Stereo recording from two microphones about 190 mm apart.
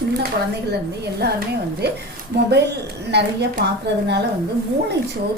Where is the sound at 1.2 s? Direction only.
60° right (ahead or behind).